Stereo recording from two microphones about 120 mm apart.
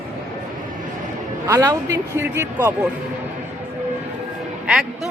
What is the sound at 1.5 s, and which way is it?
A man's voice, 25° right (ahead or behind).